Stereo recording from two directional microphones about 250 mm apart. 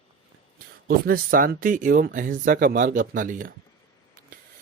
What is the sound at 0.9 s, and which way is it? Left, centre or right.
Speech, right.